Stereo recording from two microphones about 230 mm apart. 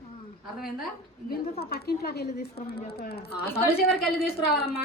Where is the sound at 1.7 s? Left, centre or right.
Left.